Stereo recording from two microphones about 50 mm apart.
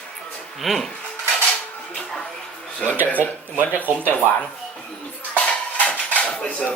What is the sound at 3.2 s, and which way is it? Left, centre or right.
Speech, right.